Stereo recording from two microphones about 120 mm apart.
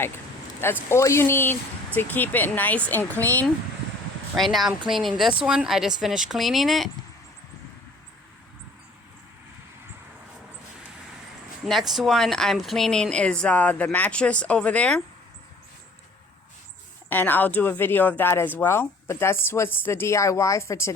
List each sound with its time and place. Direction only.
0.6 s speech: 20° left (ahead or behind)
4.4 s speech: centre (ahead or behind)
11.6 s speech: centre (ahead or behind)
17.1 s speech: 15° left (ahead or behind)